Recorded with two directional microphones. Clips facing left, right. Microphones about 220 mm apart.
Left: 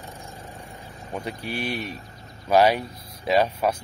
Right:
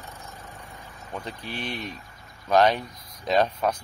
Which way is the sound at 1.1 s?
10° left (ahead or behind).